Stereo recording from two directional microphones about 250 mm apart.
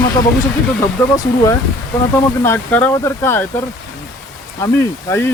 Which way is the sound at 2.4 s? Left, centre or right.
Centre.